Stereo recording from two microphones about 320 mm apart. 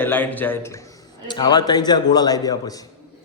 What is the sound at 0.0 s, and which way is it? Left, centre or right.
A man's voice, centre.